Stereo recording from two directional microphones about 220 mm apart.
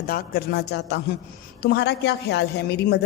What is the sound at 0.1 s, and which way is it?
A woman's voice, 45° left (ahead or behind).